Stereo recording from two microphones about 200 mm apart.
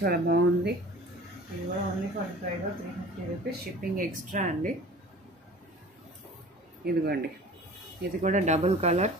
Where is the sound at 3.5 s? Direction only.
45° right (ahead or behind).